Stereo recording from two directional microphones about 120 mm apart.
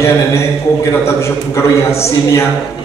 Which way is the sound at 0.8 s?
25° left (ahead or behind).